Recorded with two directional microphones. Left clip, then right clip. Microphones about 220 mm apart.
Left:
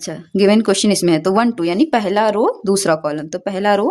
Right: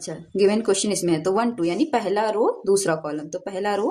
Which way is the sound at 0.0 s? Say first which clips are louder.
Left 5 dB; 45° left (ahead or behind).